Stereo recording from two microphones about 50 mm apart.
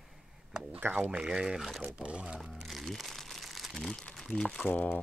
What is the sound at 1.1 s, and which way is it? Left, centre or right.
Speech, centre.